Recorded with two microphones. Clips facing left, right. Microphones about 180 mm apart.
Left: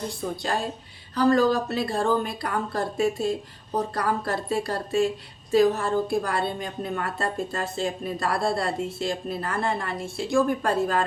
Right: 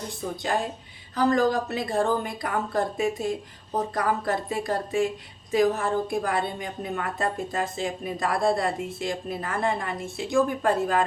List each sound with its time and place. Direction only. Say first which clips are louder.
0.4 s a woman's voice: right 3 dB; 15° right (ahead or behind)